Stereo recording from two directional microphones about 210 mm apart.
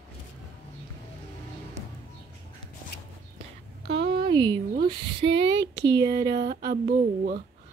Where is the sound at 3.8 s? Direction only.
50° right (ahead or behind).